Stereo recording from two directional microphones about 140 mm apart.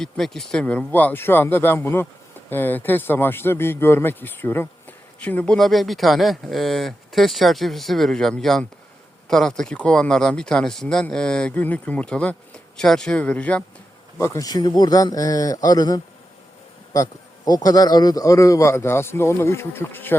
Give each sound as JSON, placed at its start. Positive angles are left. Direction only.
{"t": 0.0, "sound": "speech", "side_deg": 0}
{"t": 14.2, "sound": "a man's voice", "side_deg": 20}